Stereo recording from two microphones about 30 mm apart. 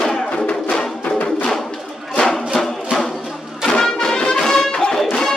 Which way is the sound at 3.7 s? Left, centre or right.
Left.